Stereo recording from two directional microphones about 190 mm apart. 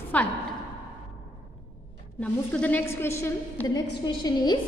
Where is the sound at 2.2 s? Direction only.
5° left (ahead or behind).